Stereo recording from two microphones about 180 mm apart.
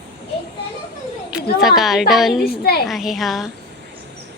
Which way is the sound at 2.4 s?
60° left (ahead or behind).